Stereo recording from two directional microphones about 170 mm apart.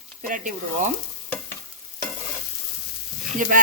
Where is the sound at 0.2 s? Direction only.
50° right (ahead or behind).